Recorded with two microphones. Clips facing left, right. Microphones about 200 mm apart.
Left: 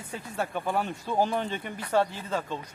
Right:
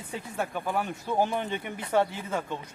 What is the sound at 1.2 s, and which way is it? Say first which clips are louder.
Speech: left 1 dB; 15° right (ahead or behind).